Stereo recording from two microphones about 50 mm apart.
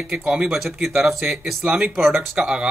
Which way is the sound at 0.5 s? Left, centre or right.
Centre.